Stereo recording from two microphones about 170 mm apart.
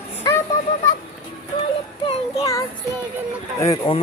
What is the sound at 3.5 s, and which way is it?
Speech, 20° left (ahead or behind).